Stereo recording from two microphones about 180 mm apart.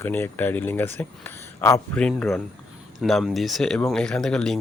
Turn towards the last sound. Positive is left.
turn(degrees=5)  # may be behind; listen again after turning